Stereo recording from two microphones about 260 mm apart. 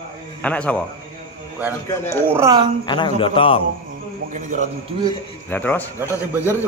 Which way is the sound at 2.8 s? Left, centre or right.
Centre.